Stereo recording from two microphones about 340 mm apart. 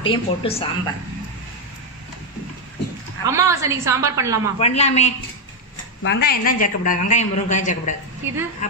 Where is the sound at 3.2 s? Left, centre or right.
Centre.